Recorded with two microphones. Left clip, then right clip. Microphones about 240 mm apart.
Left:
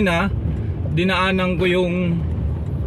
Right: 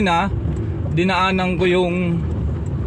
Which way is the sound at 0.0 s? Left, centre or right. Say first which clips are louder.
Right 2 dB; centre.